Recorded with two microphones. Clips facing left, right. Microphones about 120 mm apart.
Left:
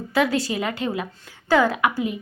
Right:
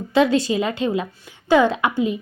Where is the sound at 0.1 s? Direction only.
25° right (ahead or behind).